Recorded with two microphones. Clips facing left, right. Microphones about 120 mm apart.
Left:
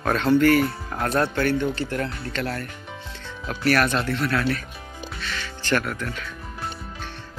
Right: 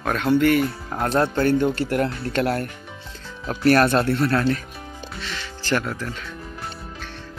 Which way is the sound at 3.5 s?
30° right (ahead or behind).